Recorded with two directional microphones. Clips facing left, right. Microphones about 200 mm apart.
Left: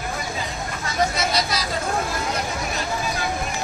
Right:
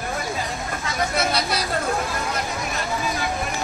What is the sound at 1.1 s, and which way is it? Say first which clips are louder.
Vehicle: right 1 dB; 55° right (ahead or behind).